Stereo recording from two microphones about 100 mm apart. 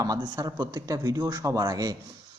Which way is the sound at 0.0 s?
40° right (ahead or behind).